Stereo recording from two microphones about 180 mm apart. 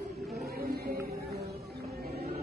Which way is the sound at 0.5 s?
60° right (ahead or behind).